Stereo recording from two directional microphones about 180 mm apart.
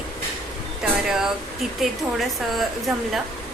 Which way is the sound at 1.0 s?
Centre (ahead or behind).